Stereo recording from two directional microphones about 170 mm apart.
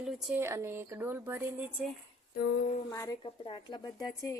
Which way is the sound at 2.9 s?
20° left (ahead or behind).